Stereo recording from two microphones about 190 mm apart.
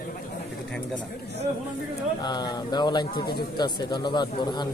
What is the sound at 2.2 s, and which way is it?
Speech, 20° left (ahead or behind).